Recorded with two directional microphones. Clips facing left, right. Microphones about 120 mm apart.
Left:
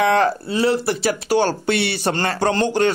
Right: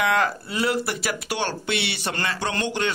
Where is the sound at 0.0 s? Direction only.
35° left (ahead or behind).